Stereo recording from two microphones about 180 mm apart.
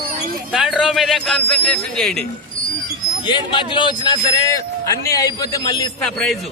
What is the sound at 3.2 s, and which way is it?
A man's voice, 25° left (ahead or behind).